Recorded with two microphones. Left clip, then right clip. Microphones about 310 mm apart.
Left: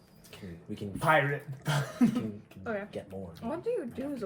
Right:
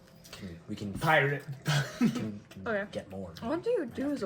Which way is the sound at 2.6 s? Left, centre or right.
Right.